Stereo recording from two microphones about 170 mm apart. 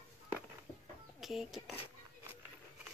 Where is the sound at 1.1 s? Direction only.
Centre (ahead or behind).